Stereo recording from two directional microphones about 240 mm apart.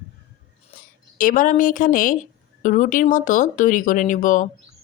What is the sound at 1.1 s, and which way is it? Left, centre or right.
Speech, left.